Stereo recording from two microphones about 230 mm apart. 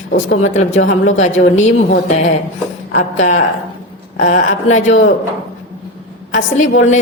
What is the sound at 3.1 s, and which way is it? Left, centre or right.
Speech, left.